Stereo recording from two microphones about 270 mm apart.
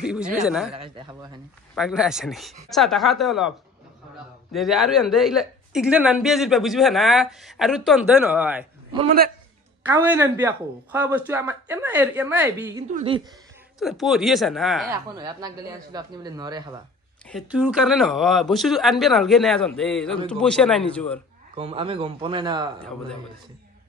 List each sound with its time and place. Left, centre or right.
0.0 s speech: centre
0.7 s speech: centre
1.8 s speech: centre
9.8 s speech: centre
12.9 s speech: centre
13.7 s speech: centre
14.9 s speech: centre
17.3 s speech: centre
21.5 s speech: centre